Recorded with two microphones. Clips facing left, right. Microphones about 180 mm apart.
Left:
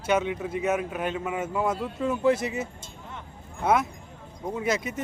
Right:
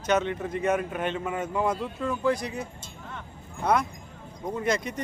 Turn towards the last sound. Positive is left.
turn(degrees=5)  # may be behind; listen again after turning